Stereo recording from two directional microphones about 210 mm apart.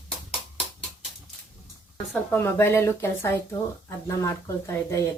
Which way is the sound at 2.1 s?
10° left (ahead or behind).